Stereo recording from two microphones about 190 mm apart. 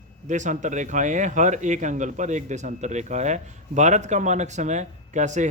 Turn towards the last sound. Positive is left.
turn(degrees=-40)  # may be behind; listen again after turning